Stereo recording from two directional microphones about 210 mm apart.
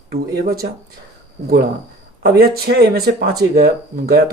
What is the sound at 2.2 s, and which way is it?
Speech, 45° right (ahead or behind).